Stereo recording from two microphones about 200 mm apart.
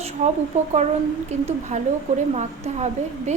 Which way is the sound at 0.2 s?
35° right (ahead or behind).